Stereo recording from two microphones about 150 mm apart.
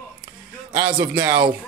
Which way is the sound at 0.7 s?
30° right (ahead or behind).